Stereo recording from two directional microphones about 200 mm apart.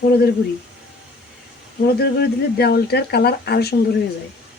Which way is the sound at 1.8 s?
55° left (ahead or behind).